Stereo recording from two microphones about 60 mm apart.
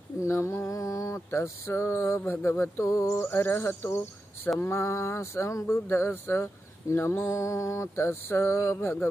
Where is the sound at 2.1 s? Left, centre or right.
Left.